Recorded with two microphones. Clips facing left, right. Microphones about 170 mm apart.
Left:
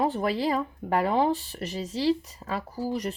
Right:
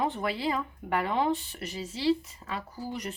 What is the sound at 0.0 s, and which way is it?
Speech, 35° left (ahead or behind).